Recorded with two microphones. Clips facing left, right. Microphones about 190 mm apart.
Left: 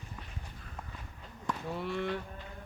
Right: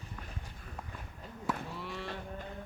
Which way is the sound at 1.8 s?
55° left (ahead or behind).